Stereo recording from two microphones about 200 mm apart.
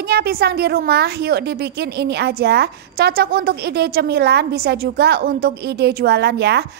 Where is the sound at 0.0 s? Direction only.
50° right (ahead or behind).